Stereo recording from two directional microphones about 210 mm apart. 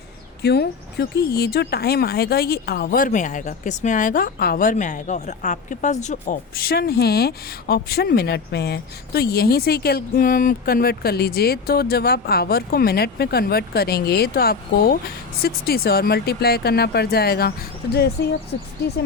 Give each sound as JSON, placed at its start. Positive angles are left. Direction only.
{"t": 0.4, "sound": "speech", "side_deg": 50}